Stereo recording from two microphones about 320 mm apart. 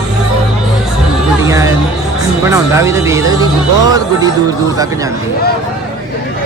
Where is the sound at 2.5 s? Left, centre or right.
Centre.